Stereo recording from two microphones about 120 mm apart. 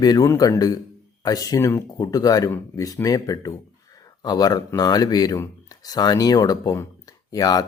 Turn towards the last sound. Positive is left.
turn(degrees=30)  # may be behind; listen again after turning